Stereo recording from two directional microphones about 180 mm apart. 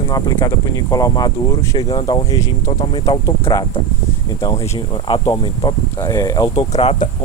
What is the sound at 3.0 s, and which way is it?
Speech, 20° left (ahead or behind).